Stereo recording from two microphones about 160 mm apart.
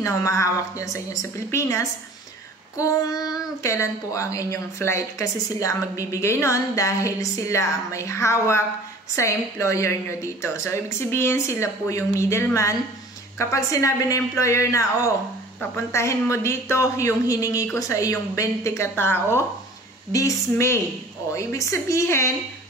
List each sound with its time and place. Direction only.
0.0 s a woman's voice: 20° left (ahead or behind)